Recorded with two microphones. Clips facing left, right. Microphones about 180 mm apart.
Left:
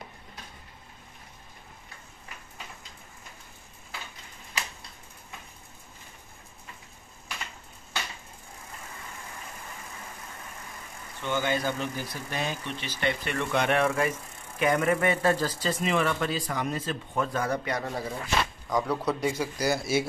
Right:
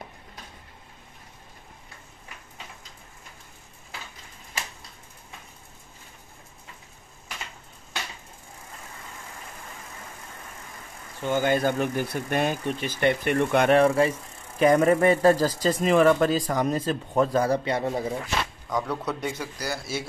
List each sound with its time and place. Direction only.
11.2 s speech: 45° right (ahead or behind)
13.7 s a man's voice: 35° right (ahead or behind)
18.7 s a man's voice: centre (ahead or behind)